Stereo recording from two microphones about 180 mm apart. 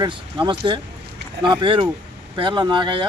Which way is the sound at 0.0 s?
25° right (ahead or behind).